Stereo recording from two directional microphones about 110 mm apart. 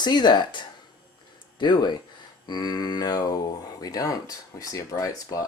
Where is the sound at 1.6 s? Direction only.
45° left (ahead or behind).